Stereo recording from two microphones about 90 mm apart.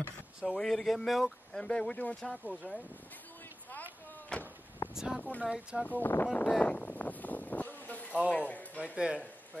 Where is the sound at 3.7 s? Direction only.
20° left (ahead or behind).